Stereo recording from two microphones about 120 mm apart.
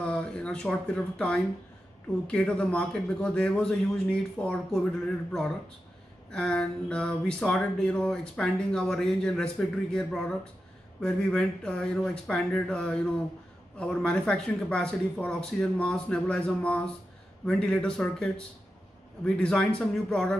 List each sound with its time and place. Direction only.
0.0 s speech: 5° left (ahead or behind)